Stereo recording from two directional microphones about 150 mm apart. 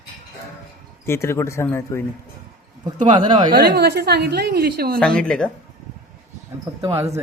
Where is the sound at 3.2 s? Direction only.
30° right (ahead or behind).